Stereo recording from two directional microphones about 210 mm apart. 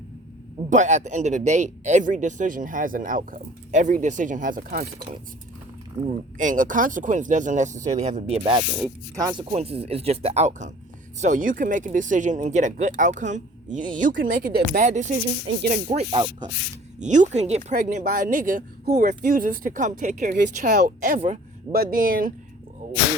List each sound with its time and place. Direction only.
0.7 s speech: 35° right (ahead or behind)
6.1 s speech: 40° right (ahead or behind); by 16.5 s 20° right (ahead or behind)
17.0 s speech: 35° right (ahead or behind)